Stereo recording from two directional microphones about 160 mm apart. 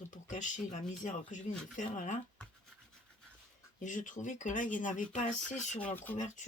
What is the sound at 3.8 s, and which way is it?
Speech, 55° left (ahead or behind).